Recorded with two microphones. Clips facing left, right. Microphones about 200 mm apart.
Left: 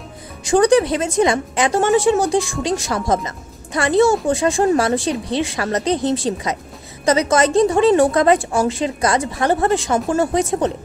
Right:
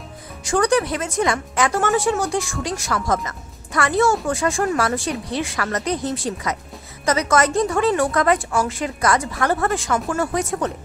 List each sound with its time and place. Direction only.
0.6 s a woman's voice: 25° left (ahead or behind)